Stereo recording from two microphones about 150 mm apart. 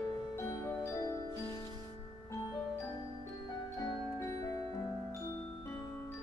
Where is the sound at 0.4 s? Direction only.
15° left (ahead or behind).